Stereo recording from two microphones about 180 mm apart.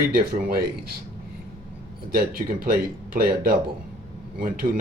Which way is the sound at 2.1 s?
55° right (ahead or behind).